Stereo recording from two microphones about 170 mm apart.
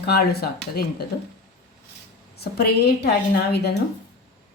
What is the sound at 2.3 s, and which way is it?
Speech, 70° left (ahead or behind).